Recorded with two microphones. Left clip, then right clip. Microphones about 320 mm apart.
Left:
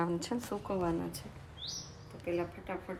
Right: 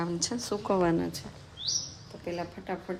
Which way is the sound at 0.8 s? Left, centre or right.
Right.